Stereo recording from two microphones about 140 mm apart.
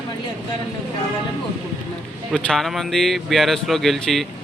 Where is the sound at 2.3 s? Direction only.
5° left (ahead or behind).